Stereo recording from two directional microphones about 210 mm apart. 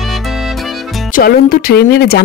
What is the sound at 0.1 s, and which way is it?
Music, centre (ahead or behind).